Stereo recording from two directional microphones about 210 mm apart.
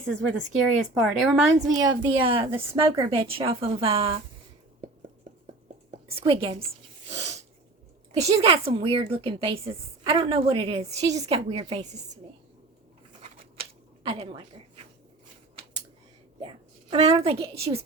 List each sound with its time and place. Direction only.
0.6 s speech: centre (ahead or behind)
1.5 s speech: 20° right (ahead or behind)
6.1 s speech: 25° right (ahead or behind)
7.1 s snort: 30° right (ahead or behind)
8.3 s a woman's voice: 25° right (ahead or behind)
13.2 s a sound: 25° right (ahead or behind)
16.4 s a sound: 25° right (ahead or behind)
17.4 s speech: 30° right (ahead or behind)